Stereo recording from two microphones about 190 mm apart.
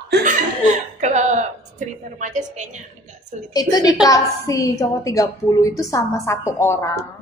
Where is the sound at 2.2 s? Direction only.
40° right (ahead or behind).